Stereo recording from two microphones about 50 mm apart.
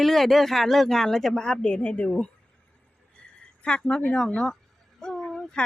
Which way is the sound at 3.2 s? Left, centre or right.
Left.